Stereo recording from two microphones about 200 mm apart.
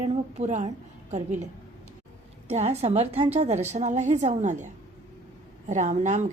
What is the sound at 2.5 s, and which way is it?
A woman's voice, 35° right (ahead or behind).